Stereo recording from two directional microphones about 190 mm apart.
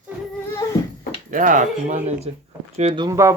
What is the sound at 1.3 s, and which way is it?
Speech, 45° right (ahead or behind).